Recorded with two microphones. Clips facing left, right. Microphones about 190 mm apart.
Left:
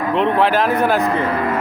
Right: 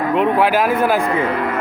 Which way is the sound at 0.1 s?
10° right (ahead or behind).